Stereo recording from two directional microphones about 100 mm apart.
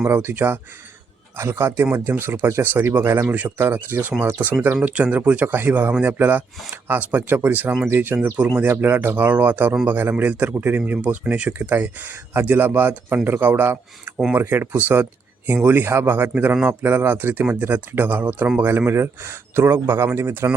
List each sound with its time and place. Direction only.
0.0 s a man's voice: 25° right (ahead or behind)